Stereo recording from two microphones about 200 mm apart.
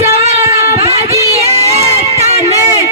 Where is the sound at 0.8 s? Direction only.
30° right (ahead or behind).